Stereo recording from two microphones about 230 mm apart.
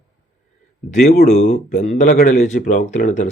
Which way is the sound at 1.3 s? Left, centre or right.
Left.